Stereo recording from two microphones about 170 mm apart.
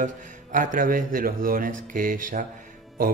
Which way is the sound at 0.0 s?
50° right (ahead or behind).